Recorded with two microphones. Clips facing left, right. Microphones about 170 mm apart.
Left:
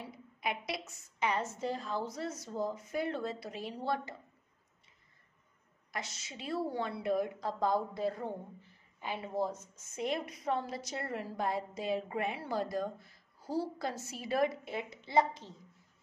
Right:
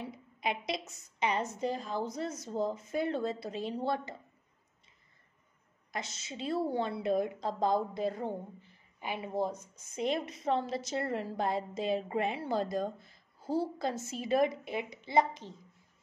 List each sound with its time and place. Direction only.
0.0 s a woman's voice: 20° right (ahead or behind)
5.9 s a woman's voice: 25° right (ahead or behind)